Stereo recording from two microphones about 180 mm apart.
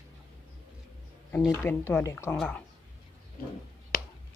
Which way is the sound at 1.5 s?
15° left (ahead or behind).